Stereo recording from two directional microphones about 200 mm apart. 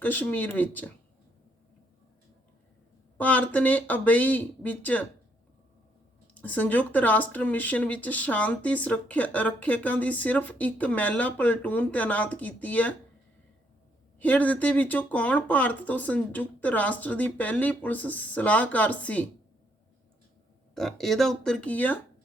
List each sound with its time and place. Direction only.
0.0 s speech: 10° left (ahead or behind)
3.2 s speech: 10° left (ahead or behind)
6.3 s speech: 10° left (ahead or behind)
14.2 s speech: 10° left (ahead or behind)
20.7 s speech: centre (ahead or behind)